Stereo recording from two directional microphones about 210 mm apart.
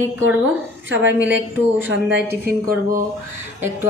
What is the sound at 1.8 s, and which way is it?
Speech, 55° right (ahead or behind).